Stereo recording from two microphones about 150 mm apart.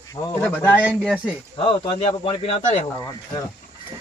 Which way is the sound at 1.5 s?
35° left (ahead or behind).